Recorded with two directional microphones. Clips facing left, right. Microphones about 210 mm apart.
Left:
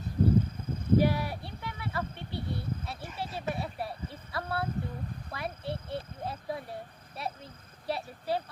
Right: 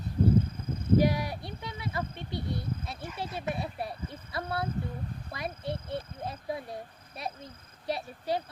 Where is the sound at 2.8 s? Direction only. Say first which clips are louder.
Right 1 dB; 20° right (ahead or behind).